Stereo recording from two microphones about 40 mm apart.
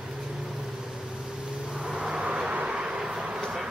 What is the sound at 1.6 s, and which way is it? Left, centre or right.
Vehicle, centre.